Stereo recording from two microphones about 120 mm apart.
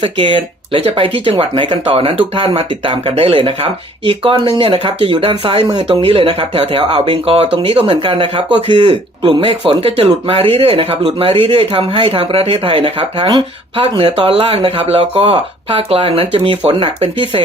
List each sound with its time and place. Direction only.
0.0 s speech: 45° right (ahead or behind)